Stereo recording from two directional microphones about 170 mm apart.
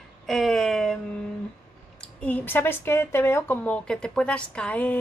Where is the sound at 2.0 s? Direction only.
10° left (ahead or behind).